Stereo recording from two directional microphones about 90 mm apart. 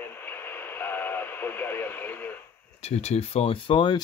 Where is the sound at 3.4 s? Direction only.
90° left.